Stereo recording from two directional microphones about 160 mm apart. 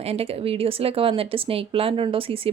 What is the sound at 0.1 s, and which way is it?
Speech, 40° right (ahead or behind).